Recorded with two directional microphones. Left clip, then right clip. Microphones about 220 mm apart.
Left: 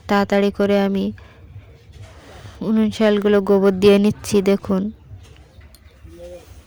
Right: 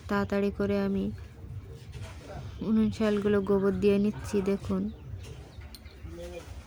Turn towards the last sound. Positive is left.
turn(degrees=40)  # may be behind; listen again after turning